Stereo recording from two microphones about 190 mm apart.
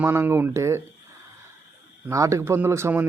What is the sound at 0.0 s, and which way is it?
Speech, 10° right (ahead or behind).